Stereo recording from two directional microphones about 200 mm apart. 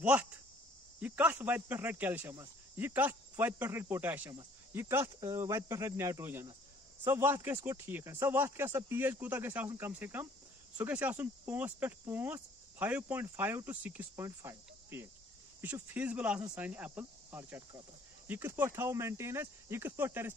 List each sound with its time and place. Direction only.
0.0 s speech: 5° right (ahead or behind)
16.3 s speech: 15° right (ahead or behind)